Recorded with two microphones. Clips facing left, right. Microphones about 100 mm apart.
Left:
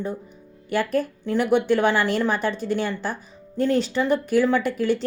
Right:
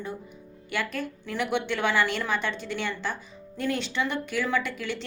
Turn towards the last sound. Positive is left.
turn(degrees=40)  # may be behind; listen again after turning